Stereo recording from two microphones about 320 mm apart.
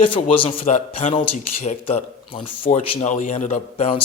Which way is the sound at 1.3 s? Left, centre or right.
Left.